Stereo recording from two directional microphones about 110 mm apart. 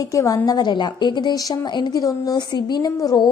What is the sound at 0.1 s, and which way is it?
A woman's voice, 30° left (ahead or behind).